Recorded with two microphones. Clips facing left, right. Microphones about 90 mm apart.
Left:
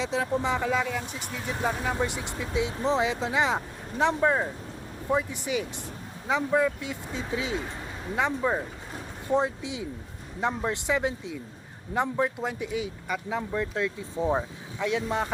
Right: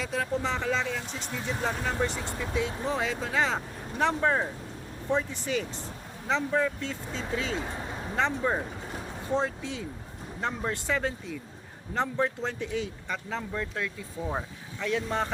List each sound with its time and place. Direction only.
0.0 s speech: 20° left (ahead or behind)